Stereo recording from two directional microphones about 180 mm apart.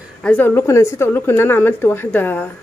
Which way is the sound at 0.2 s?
10° left (ahead or behind).